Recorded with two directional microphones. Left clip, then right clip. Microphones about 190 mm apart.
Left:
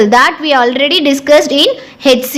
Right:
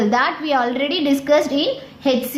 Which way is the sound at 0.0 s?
45° left (ahead or behind).